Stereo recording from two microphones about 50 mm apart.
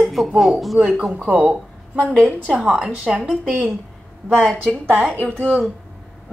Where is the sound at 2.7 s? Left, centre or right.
Centre.